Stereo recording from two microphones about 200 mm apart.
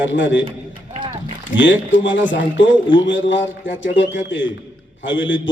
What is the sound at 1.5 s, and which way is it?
A man's voice, 65° left (ahead or behind).